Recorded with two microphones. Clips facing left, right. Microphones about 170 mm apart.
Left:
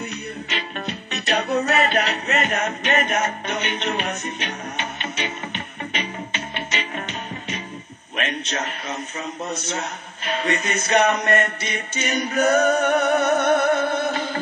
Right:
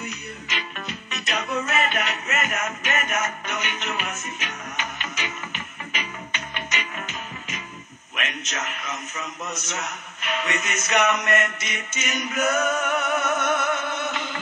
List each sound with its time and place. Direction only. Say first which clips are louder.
0.0 s music: left 5 dB; 30° left (ahead or behind)
8.2 s a man's voice: left 5 dB; 30° left (ahead or behind)